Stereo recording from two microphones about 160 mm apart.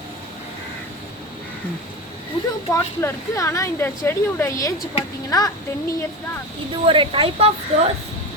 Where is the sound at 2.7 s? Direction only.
20° left (ahead or behind).